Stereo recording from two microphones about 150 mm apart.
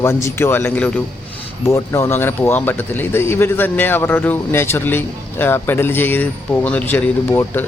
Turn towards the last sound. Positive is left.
turn(degrees=15)  # may be behind; listen again after turning